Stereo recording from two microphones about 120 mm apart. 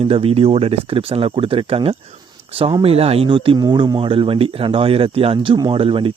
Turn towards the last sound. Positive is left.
turn(degrees=-50)  # may be behind; listen again after turning